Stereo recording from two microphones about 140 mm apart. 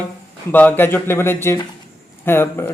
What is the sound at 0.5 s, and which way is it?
Speech, 15° left (ahead or behind).